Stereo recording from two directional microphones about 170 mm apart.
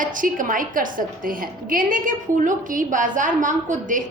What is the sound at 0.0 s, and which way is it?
A woman's voice, 50° right (ahead or behind).